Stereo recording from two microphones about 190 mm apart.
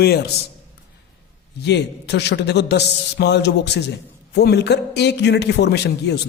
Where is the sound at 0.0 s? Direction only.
60° left (ahead or behind).